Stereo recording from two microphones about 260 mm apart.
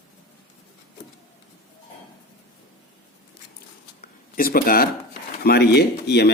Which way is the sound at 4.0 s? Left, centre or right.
Left.